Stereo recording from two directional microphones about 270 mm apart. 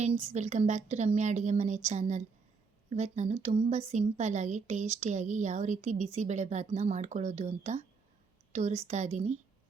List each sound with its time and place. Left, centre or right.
0.0 s a woman's voice: right